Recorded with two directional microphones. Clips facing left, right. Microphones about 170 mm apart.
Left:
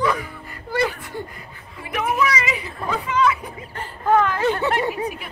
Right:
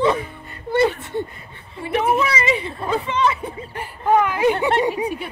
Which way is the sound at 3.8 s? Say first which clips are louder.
Right 1 dB; 15° right (ahead or behind).